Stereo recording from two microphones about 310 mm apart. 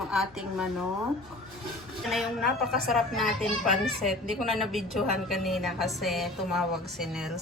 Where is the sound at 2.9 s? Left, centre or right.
Centre.